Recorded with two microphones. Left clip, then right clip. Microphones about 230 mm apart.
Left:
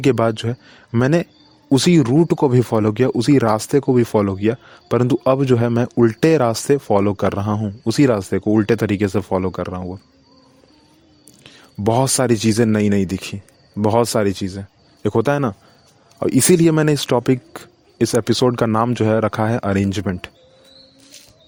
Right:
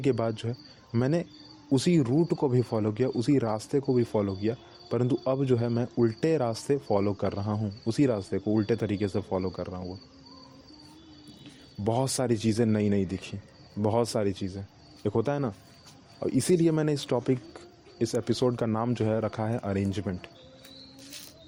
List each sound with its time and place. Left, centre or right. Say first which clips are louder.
0.0 s speech: left 11 dB; left
11.8 s speech: left 11 dB; left